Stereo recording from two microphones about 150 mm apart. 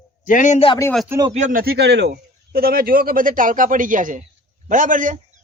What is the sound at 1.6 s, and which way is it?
A man's voice, 90° right.